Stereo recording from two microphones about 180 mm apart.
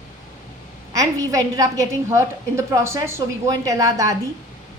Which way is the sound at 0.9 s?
20° right (ahead or behind).